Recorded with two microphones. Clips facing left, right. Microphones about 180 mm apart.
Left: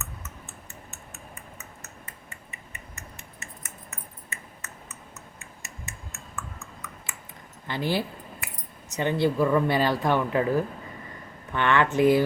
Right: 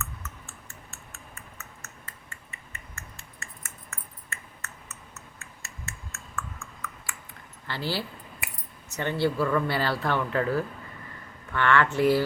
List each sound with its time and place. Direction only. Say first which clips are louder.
0.0 s clicking: right 1 dB; 20° left (ahead or behind)
1.4 s a sound: left 2 dB; 20° left (ahead or behind)
7.7 s speech: left 4 dB; 15° left (ahead or behind)